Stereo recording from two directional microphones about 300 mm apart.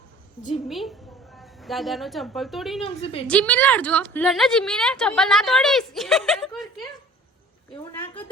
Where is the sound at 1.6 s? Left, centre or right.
Centre.